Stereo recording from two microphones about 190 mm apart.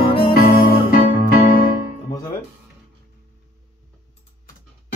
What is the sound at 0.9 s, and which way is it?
Electric piano, 50° left (ahead or behind).